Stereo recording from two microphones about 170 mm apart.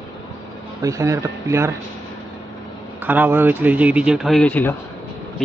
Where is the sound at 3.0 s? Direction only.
10° right (ahead or behind); by 4.7 s 10° left (ahead or behind).